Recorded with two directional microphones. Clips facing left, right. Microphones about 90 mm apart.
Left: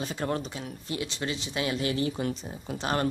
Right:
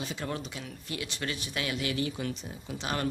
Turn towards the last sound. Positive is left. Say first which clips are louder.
# left 5 dB
turn(degrees=40)  # may be behind; listen again after turning